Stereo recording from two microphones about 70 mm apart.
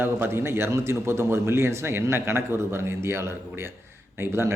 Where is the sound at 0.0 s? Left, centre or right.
Right.